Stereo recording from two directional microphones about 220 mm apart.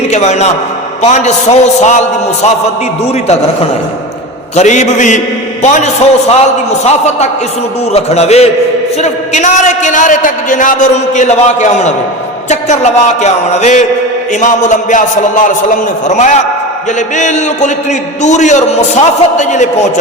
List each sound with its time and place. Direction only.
0.1 s a man's voice: 30° left (ahead or behind)
4.5 s a man's voice: 35° left (ahead or behind)